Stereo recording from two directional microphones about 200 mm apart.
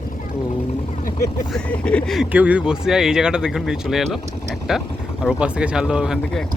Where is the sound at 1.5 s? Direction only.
5° left (ahead or behind).